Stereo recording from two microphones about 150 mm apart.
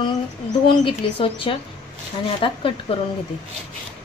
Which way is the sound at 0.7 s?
35° left (ahead or behind).